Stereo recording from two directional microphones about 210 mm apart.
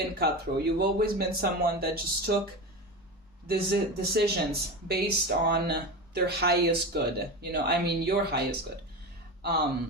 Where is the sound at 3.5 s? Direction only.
50° right (ahead or behind).